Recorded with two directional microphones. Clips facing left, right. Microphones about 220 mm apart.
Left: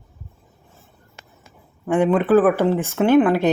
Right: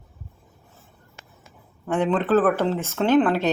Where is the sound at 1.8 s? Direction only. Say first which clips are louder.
Left 5 dB; 10° left (ahead or behind).